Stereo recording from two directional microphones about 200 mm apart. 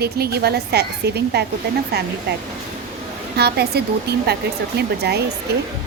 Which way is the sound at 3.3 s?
55° right (ahead or behind).